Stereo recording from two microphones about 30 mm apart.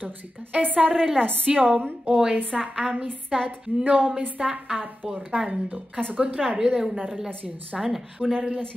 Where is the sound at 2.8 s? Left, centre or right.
Right.